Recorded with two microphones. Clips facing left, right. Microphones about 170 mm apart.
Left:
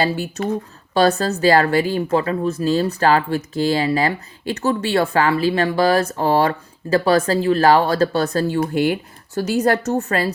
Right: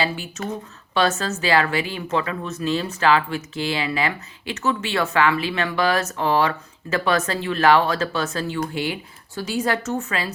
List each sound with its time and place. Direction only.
0.0 s speech: 40° left (ahead or behind)